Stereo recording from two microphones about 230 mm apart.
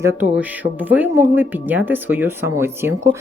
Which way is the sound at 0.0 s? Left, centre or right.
Centre.